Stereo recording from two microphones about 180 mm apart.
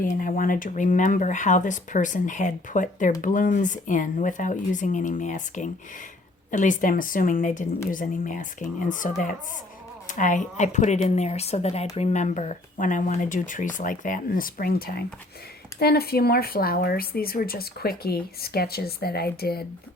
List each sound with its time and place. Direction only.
0.0 s speech: 50° left (ahead or behind)